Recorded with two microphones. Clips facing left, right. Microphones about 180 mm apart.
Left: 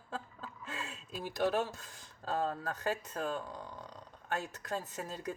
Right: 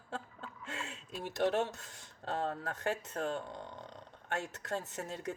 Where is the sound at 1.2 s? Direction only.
25° right (ahead or behind).